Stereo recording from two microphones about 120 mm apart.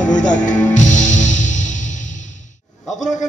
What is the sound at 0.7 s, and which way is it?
Music, 90° left.